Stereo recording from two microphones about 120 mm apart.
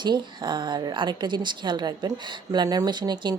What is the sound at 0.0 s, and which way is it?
Speech, 40° right (ahead or behind).